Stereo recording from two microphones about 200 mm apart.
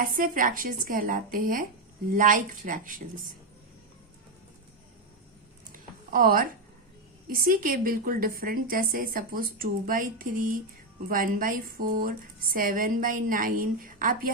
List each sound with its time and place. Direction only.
0.0 s a woman's voice: 45° right (ahead or behind)
5.7 s a sound: 45° right (ahead or behind)
7.3 s a woman's voice: 45° right (ahead or behind)